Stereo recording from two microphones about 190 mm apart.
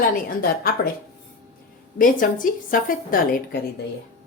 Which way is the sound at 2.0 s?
45° left (ahead or behind).